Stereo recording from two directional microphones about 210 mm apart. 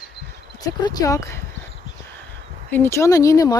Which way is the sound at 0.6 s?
15° left (ahead or behind).